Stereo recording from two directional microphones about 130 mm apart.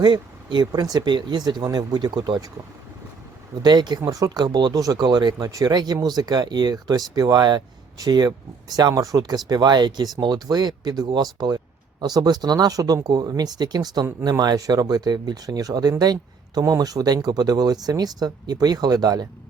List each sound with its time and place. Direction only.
0.0 s speech: 35° right (ahead or behind)
3.6 s speech: 35° right (ahead or behind)